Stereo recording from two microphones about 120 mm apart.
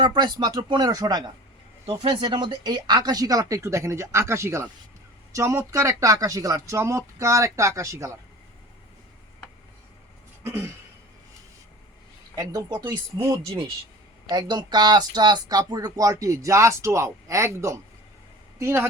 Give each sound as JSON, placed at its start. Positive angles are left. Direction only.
{"t": 0.0, "sound": "speech", "side_deg": -35}
{"t": 1.9, "sound": "speech", "side_deg": -45}
{"t": 10.4, "sound": "throat clearing", "side_deg": -20}
{"t": 12.4, "sound": "speech", "side_deg": -30}